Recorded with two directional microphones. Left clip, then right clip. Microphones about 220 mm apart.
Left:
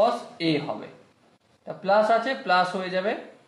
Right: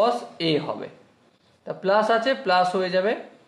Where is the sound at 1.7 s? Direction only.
40° right (ahead or behind).